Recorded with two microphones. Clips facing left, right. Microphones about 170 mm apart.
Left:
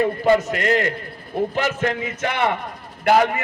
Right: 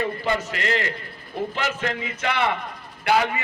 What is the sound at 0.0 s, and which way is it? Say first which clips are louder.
A man's voice: left 8 dB; 50° left (ahead or behind).